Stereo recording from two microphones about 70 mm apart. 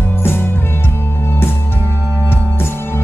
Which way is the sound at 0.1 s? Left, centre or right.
Left.